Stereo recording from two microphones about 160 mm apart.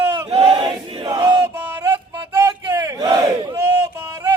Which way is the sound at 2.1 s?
25° right (ahead or behind).